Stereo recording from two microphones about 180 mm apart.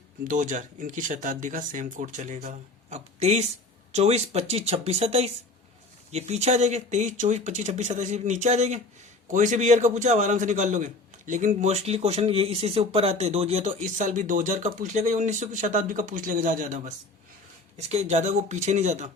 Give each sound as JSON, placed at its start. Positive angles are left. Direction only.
{"t": 0.3, "sound": "a man's voice", "side_deg": -45}